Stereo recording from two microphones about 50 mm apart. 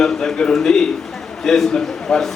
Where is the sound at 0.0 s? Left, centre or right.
Centre.